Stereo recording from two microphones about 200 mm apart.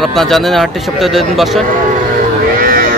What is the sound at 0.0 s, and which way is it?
Speech, centre (ahead or behind).